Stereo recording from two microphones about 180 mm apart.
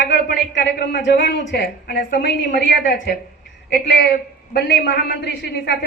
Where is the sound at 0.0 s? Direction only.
75° left (ahead or behind).